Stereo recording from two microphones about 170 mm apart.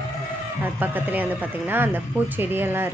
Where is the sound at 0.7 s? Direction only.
10° right (ahead or behind).